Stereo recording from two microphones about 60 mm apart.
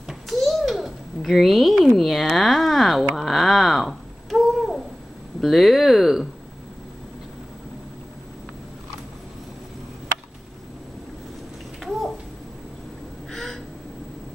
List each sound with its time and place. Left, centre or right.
0.1 s babbling: centre
2.0 s speech: centre
11.8 s babbling: centre
13.3 s crow: centre